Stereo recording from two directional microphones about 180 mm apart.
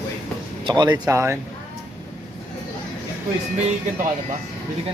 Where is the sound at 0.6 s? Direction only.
25° right (ahead or behind).